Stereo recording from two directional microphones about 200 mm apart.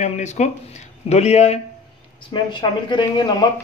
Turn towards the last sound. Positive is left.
turn(degrees=20)  # may be behind; listen again after turning